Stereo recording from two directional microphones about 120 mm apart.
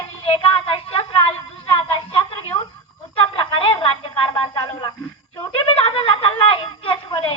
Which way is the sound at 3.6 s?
45° left (ahead or behind).